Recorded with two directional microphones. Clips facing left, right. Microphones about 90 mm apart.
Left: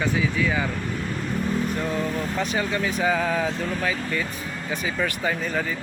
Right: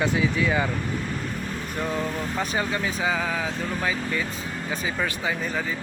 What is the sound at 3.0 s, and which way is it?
Speech, 10° right (ahead or behind).